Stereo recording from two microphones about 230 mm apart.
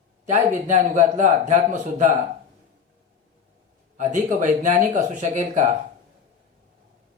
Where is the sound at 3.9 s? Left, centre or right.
Right.